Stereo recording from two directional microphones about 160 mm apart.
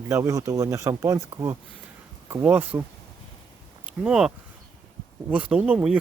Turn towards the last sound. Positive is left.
turn(degrees=-5)  # may be behind; listen again after turning